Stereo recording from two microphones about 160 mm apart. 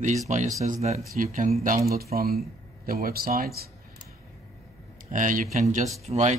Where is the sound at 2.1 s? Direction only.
70° right (ahead or behind).